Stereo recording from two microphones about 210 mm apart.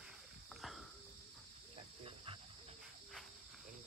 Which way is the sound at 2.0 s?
25° right (ahead or behind).